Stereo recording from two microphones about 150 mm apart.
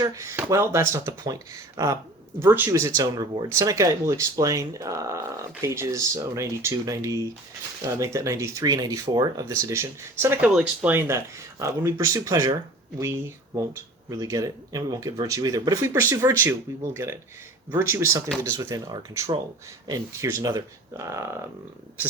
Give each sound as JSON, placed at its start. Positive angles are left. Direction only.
{"t": 0.0, "sound": "speech", "side_deg": -20}